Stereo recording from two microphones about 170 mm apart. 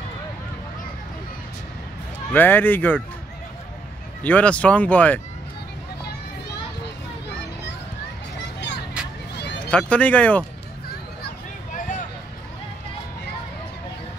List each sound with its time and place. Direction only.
2.3 s speech: 10° left (ahead or behind)
4.2 s speech: 10° left (ahead or behind)
8.5 s music: 90° left
9.7 s speech: 5° left (ahead or behind)
11.2 s a sound: 50° left (ahead or behind)